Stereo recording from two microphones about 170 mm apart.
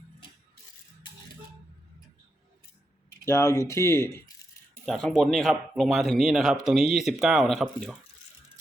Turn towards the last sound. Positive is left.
turn(degrees=0)  # may be behind; listen again after turning